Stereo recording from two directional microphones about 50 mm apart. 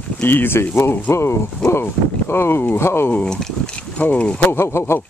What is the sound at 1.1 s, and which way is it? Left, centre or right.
Speech, left.